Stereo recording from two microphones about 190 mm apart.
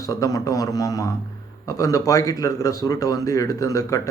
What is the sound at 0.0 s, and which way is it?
Speech, 15° left (ahead or behind).